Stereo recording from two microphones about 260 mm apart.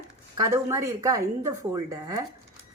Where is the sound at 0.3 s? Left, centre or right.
Centre.